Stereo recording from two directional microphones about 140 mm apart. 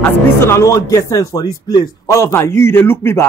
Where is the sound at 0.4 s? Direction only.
20° left (ahead or behind).